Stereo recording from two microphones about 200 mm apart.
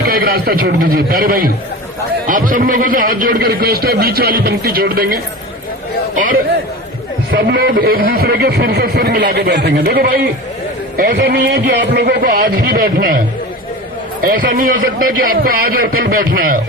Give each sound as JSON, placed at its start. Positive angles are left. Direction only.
{"t": 0.0, "sound": "speech", "side_deg": -50}
{"t": 7.3, "sound": "a man's voice", "side_deg": -55}